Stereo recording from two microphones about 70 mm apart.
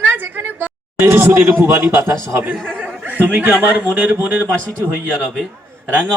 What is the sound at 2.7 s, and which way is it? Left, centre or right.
Chuckle, right.